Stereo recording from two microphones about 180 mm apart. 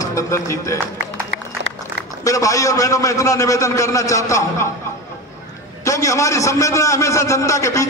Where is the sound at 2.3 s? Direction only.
20° left (ahead or behind).